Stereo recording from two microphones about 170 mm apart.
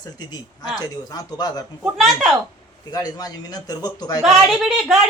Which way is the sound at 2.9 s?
25° left (ahead or behind).